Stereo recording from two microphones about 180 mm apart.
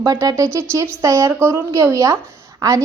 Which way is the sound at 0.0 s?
20° right (ahead or behind).